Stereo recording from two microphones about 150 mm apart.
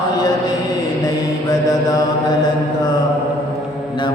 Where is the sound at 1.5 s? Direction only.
25° left (ahead or behind).